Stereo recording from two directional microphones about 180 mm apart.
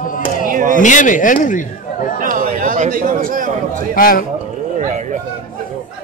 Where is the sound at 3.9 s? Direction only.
55° left (ahead or behind).